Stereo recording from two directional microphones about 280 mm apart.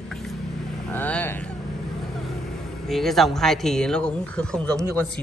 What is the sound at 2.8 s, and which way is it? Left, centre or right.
Speech, centre.